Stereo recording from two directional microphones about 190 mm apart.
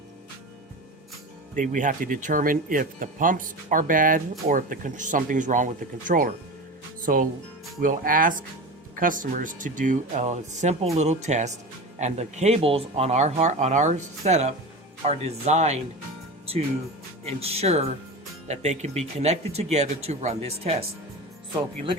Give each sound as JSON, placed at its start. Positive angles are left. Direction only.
{"t": 1.5, "sound": "speech", "side_deg": -40}
{"t": 17.4, "sound": "speech", "side_deg": -30}